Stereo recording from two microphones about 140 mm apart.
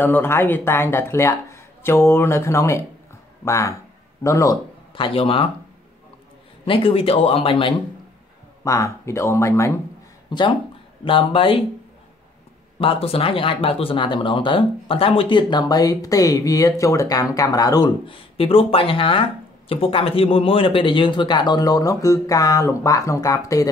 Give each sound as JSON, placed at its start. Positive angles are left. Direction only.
{"t": 0.0, "sound": "speech", "side_deg": 15}
{"t": 4.9, "sound": "speech", "side_deg": 40}
{"t": 6.6, "sound": "speech", "side_deg": 40}
{"t": 8.6, "sound": "speech", "side_deg": 20}
{"t": 10.3, "sound": "speech", "side_deg": 30}
{"t": 12.7, "sound": "speech", "side_deg": 40}